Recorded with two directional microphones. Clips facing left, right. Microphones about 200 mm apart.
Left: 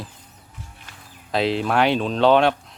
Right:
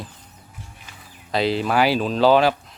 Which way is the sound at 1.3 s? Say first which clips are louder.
Even; centre (ahead or behind).